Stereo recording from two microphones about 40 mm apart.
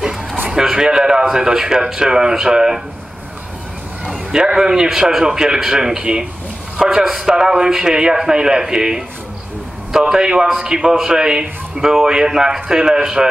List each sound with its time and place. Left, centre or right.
0.5 s a man's voice: centre
4.3 s a man's voice: centre